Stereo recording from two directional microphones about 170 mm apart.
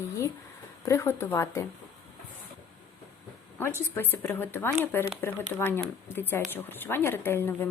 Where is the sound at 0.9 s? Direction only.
15° left (ahead or behind).